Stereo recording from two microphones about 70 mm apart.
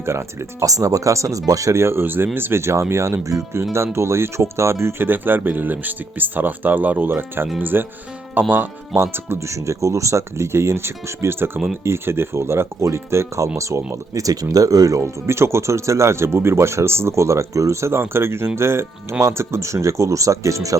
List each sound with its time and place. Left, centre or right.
0.0 s speech: right
0.6 s speech: right
1.8 s speech: right
3.2 s speech: right
3.6 s speech: right
9.6 s speech: right
15.3 s speech: right